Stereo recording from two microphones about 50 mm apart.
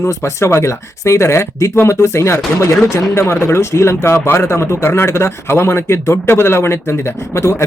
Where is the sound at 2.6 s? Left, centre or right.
Left.